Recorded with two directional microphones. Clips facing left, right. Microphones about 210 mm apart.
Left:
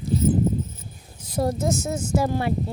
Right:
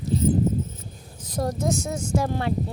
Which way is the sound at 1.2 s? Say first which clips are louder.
Left 2 dB; 10° left (ahead or behind).